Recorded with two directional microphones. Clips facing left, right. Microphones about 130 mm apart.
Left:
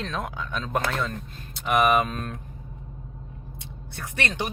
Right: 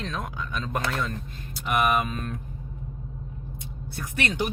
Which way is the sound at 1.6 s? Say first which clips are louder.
Left 3 dB; centre (ahead or behind).